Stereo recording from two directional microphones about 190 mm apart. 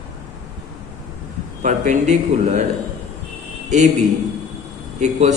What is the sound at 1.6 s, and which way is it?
A man's voice, 40° right (ahead or behind).